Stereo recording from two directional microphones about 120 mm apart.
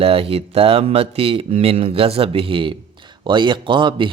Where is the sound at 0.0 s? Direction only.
55° right (ahead or behind).